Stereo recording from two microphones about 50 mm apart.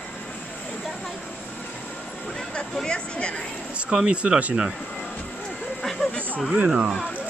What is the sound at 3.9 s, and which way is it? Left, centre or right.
Speech, centre.